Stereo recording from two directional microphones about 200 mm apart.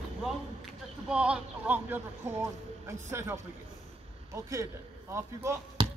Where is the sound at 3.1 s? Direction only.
15° right (ahead or behind).